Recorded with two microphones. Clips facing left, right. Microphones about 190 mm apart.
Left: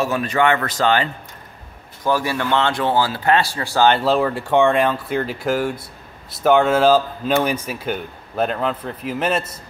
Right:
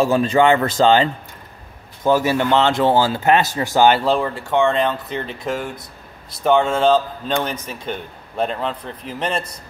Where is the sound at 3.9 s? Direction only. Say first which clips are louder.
Left 1 dB; centre (ahead or behind).